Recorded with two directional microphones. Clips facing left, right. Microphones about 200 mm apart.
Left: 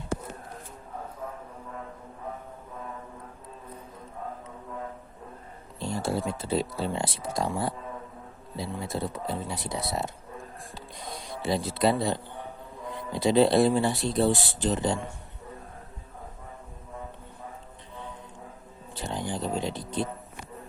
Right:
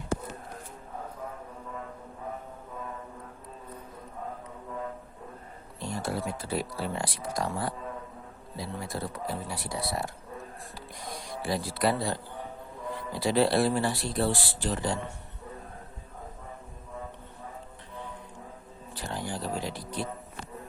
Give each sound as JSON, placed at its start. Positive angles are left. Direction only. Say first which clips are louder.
{"t": 5.8, "sound": "speech", "louder": "left 3 dB", "side_deg": 25}
{"t": 18.9, "sound": "speech", "louder": "left 3 dB", "side_deg": 20}